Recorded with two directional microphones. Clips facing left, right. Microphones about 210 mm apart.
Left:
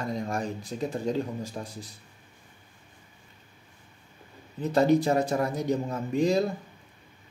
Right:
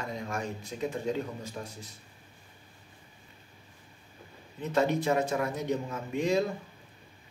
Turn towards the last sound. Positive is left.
turn(degrees=35)  # may be behind; listen again after turning